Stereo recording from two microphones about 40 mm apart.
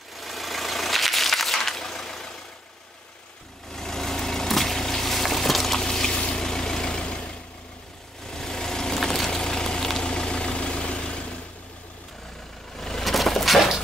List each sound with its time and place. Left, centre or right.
0.1 s vehicle: centre
3.7 s vehicle: centre
5.8 s a sound: centre
6.2 s vehicle: centre
12.7 s vehicle: centre
13.0 s a sound: centre